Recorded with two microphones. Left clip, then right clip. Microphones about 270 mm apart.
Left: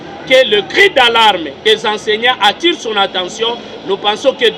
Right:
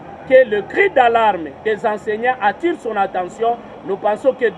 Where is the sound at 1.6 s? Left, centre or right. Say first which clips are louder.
Left 7 dB; right.